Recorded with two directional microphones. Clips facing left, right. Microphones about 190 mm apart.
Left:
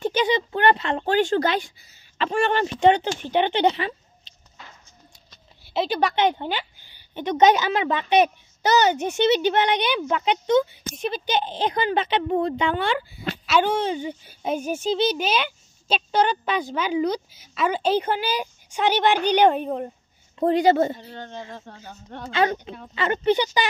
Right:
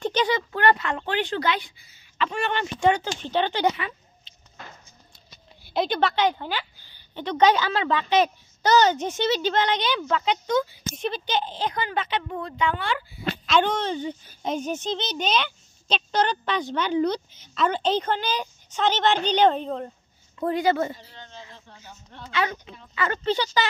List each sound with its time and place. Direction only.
0.0 s a sound: 10° left (ahead or behind)
0.5 s speech: 25° left (ahead or behind)
2.8 s speech: 20° left (ahead or behind)
5.3 s a child's voice: 5° left (ahead or behind); by 10.6 s 20° left (ahead or behind)
11.0 s speech: 10° left (ahead or behind); by 13.2 s 25° left (ahead or behind)
13.5 s a child's voice: 10° left (ahead or behind)
20.3 s speech: 25° left (ahead or behind)
21.0 s speech: 60° left (ahead or behind)
22.3 s speech: 35° left (ahead or behind)
22.9 s a child's voice: 20° left (ahead or behind)